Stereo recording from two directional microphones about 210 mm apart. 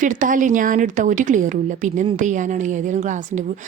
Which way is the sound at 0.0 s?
40° right (ahead or behind).